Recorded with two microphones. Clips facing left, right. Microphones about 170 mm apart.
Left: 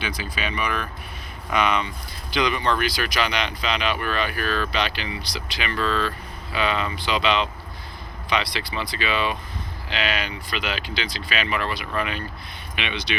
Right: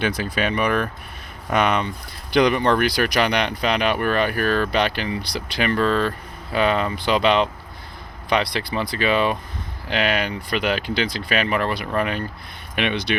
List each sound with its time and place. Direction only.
0.0 s speech: 55° right (ahead or behind)